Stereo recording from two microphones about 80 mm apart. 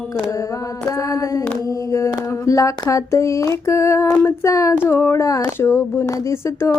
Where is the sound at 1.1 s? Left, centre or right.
Left.